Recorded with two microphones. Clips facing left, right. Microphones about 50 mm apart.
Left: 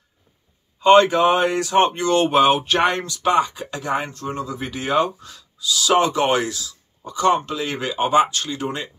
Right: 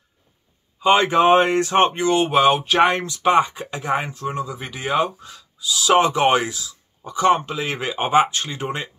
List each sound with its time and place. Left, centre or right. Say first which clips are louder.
0.7 s speech: left 4 dB; centre
1.0 s speech: right 2 dB; right
2.0 s speech: left 1 dB; centre
3.3 s speech: right 2 dB; right